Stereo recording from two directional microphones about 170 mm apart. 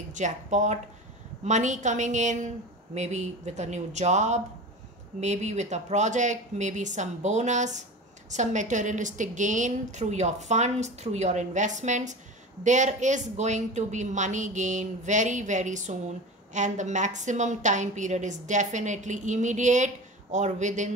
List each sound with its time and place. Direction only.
0.1 s a woman's voice: 45° right (ahead or behind)